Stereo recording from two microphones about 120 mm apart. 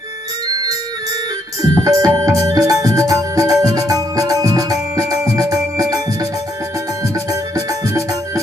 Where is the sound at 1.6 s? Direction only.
30° right (ahead or behind).